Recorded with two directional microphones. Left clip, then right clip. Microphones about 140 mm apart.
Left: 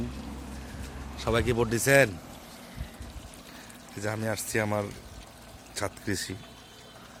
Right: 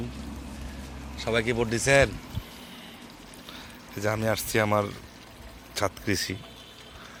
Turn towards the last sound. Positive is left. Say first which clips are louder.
# right 5 dB
turn(degrees=-5)  # may be behind; listen again after turning